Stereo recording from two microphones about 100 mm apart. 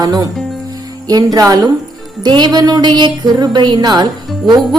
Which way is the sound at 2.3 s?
45° right (ahead or behind).